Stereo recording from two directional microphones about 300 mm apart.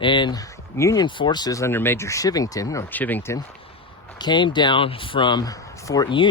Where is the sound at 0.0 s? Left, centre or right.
Centre.